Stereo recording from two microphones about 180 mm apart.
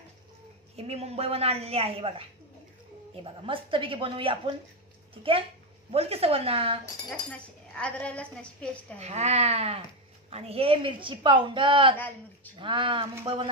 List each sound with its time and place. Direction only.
0.7 s a woman's voice: 35° right (ahead or behind)
3.3 s a man's voice: 30° right (ahead or behind)
7.2 s cutlery: 5° left (ahead or behind)
9.0 s a woman's voice: 35° right (ahead or behind)